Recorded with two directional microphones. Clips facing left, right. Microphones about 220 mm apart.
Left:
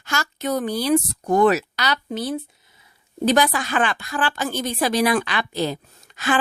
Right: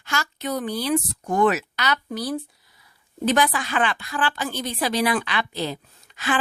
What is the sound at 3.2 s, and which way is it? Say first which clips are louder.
Speech: left 3 dB; 40° left (ahead or behind).